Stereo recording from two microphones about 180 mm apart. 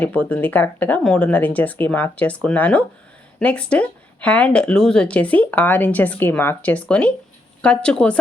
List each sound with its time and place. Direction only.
0.0 s a woman's voice: 10° left (ahead or behind)